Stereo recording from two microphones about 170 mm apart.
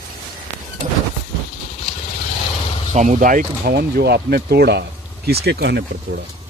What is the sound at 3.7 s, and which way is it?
Speech, 70° right (ahead or behind).